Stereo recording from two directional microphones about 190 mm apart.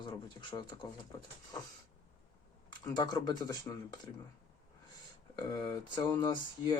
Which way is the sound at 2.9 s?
20° left (ahead or behind).